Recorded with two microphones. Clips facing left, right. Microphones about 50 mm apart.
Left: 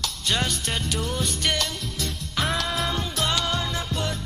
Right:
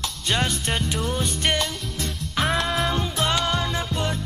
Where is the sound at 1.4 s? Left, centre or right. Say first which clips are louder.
Right 3 dB; right; by 3.7 s centre.